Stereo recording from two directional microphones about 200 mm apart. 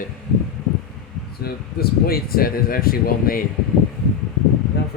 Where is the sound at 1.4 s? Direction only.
50° left (ahead or behind).